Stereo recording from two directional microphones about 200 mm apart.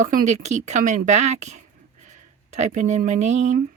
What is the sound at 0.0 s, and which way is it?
Speech, 40° right (ahead or behind).